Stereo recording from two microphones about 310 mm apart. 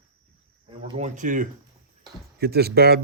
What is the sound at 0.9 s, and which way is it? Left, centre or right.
Speech, right.